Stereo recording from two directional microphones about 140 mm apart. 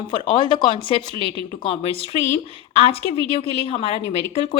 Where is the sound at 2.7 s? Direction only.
45° left (ahead or behind).